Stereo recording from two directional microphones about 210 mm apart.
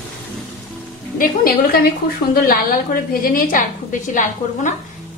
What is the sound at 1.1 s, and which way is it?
A woman's voice, 45° left (ahead or behind).